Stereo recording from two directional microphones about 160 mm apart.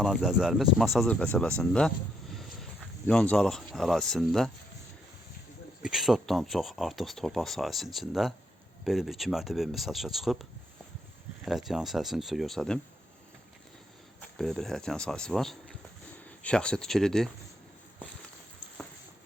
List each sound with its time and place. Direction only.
0.0 s speech: centre (ahead or behind)
2.3 s vehicle: centre (ahead or behind)
3.1 s speech: 5° left (ahead or behind)
5.8 s speech: centre (ahead or behind)
11.4 s speech: centre (ahead or behind)
14.2 s speech: 5° left (ahead or behind)